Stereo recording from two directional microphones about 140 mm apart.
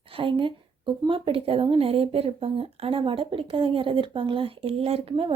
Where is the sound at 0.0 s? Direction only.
40° right (ahead or behind).